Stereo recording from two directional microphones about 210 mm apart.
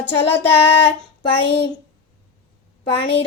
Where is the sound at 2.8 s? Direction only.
25° left (ahead or behind).